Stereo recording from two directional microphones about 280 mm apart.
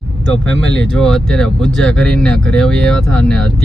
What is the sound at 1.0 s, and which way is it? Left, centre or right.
Speech, centre.